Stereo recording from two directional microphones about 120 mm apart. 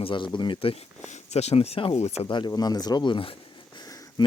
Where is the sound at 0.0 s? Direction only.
45° left (ahead or behind).